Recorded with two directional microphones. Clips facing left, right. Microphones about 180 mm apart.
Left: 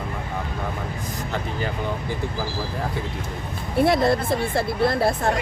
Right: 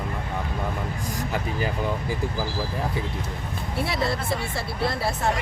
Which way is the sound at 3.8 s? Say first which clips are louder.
Left 8 dB; 50° left (ahead or behind).